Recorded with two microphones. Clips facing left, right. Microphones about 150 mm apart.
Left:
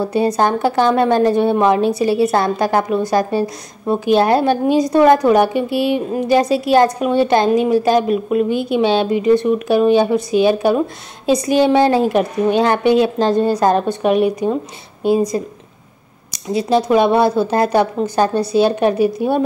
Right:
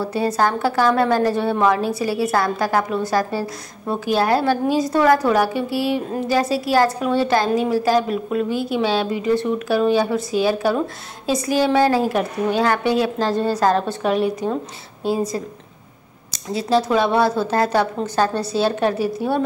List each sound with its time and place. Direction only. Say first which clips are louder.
0.0 s a woman's voice: left 4 dB; 20° left (ahead or behind)